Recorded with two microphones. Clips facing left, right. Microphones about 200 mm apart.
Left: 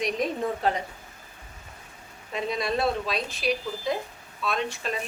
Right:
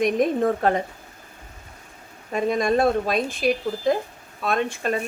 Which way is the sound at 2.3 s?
50° right (ahead or behind).